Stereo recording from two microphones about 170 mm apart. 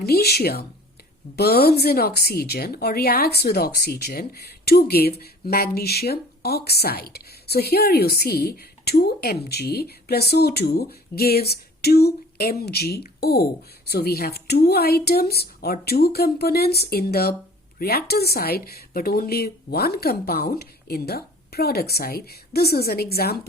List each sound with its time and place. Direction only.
0.0 s a woman's voice: 65° left (ahead or behind)